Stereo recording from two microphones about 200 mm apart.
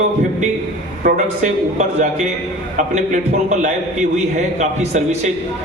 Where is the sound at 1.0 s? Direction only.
45° right (ahead or behind).